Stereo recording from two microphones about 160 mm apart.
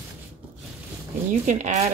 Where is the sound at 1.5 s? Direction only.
50° right (ahead or behind).